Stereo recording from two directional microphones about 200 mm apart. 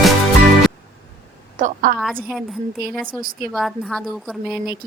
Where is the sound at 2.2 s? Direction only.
Centre (ahead or behind).